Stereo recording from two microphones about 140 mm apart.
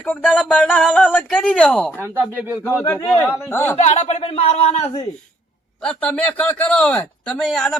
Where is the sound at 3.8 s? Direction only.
55° left (ahead or behind).